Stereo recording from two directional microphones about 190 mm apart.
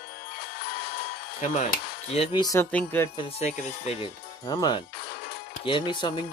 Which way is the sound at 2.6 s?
10° left (ahead or behind).